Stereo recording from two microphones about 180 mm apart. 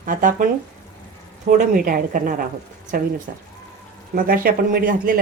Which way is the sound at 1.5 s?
50° right (ahead or behind).